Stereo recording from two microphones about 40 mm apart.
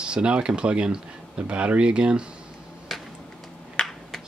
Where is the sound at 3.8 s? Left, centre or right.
Left.